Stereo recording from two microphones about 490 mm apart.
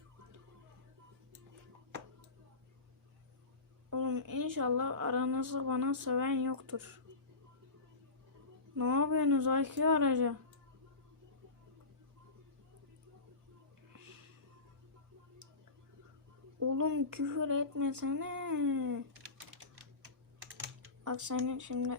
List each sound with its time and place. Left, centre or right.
3.8 s a woman's voice: right
8.7 s a woman's voice: right
16.6 s a woman's voice: right
20.8 s speech: right